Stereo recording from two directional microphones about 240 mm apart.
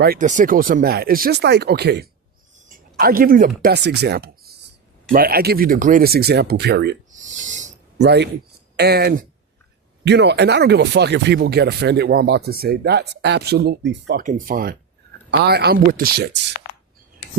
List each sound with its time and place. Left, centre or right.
0.0 s speech: right
7.1 s speech: right
7.9 s speech: right